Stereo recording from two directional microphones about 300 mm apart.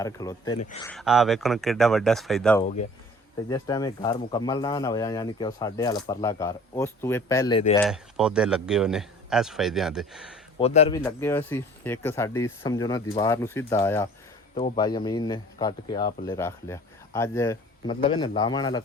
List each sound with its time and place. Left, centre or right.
0.0 s speech: centre
0.9 s a man's voice: centre
7.9 s a man's voice: centre
10.6 s a man's voice: centre
11.0 s speech: centre